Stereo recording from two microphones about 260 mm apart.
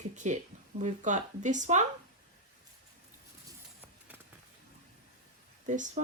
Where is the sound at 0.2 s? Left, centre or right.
Right.